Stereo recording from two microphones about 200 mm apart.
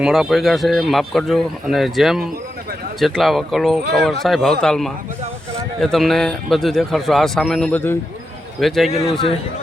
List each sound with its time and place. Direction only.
0.0 s speech: centre (ahead or behind)
8.9 s a man's voice: 30° left (ahead or behind)